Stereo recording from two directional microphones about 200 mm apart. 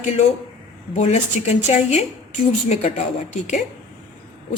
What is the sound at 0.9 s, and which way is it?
A woman's voice, 30° left (ahead or behind).